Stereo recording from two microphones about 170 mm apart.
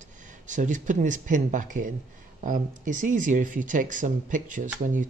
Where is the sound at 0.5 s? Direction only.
50° right (ahead or behind).